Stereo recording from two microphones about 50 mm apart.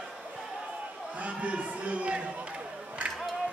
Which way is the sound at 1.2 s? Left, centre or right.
Right.